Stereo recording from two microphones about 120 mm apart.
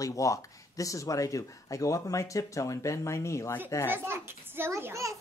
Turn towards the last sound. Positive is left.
turn(degrees=-25)  # may be behind; listen again after turning